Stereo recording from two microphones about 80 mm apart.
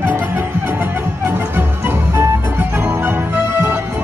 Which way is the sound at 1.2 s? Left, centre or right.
Right.